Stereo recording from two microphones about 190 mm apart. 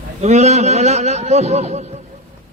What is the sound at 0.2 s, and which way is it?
A man's voice, 35° right (ahead or behind).